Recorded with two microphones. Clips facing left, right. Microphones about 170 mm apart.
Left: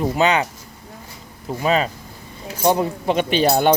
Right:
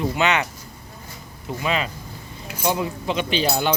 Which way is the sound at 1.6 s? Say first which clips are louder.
Left 6 dB; 40° left (ahead or behind).